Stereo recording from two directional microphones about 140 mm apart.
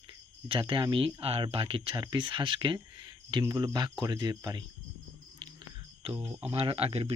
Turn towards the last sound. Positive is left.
turn(degrees=-45)  # may be behind; listen again after turning